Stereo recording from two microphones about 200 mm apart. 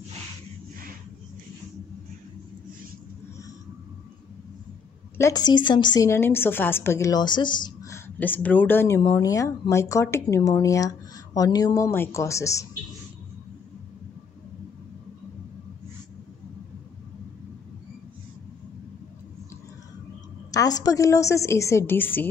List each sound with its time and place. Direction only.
5.1 s a woman's voice: 15° left (ahead or behind)
20.5 s a woman's voice: 20° left (ahead or behind)